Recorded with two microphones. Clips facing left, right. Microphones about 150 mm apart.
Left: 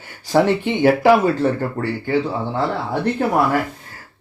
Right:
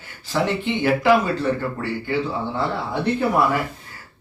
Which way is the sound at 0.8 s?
45° left (ahead or behind).